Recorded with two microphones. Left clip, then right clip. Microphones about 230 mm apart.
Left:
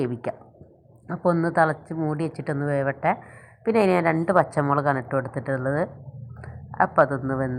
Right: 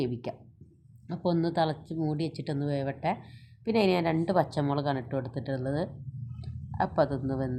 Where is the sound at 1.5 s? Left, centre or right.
Centre.